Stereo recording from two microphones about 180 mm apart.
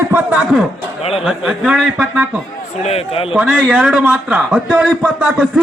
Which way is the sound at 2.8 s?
35° left (ahead or behind).